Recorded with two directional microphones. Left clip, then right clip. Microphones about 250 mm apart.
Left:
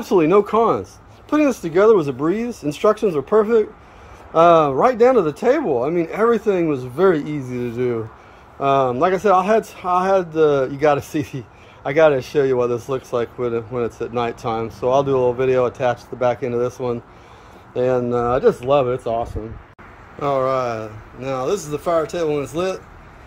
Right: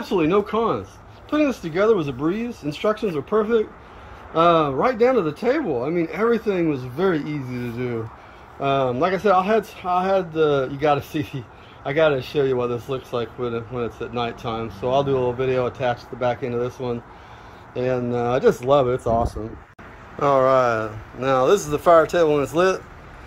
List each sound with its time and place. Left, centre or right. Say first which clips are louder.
0.0 s speech: left 5 dB; centre